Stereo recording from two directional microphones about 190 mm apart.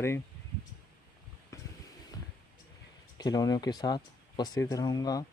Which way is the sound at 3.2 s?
20° left (ahead or behind).